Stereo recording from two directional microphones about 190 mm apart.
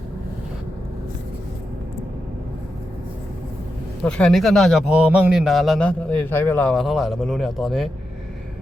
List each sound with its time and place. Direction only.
4.0 s a man's voice: 5° left (ahead or behind)